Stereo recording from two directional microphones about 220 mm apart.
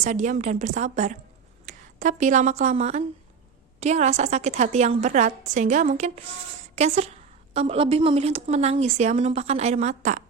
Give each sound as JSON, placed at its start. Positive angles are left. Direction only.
{"t": 0.0, "sound": "a woman's voice", "side_deg": -35}